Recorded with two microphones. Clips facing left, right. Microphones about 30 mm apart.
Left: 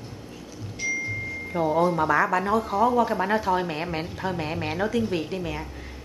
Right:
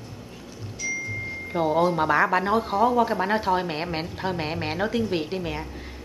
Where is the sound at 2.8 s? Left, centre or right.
Centre.